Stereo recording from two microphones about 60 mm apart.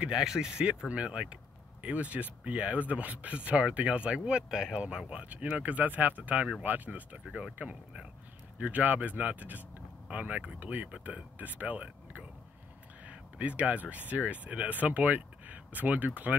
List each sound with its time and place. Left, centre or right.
0.1 s speech: centre; by 16.1 s right